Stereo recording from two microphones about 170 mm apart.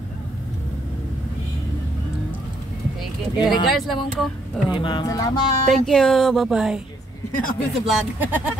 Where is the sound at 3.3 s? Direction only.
25° left (ahead or behind).